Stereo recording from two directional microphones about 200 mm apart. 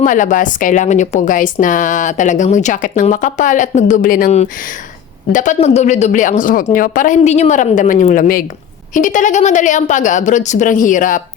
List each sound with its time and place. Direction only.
0.0 s speech: 40° left (ahead or behind)